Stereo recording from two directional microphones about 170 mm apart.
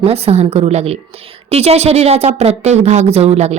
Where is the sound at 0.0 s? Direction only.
35° right (ahead or behind).